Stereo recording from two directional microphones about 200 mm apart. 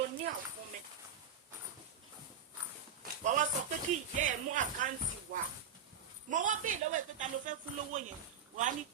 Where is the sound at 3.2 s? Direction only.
40° right (ahead or behind).